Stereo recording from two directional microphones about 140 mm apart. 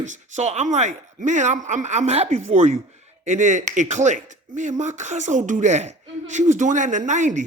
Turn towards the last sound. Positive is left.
turn(degrees=-60)  # may be behind; listen again after turning